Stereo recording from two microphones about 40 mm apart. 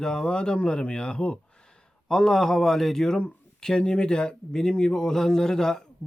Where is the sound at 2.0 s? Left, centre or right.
Centre.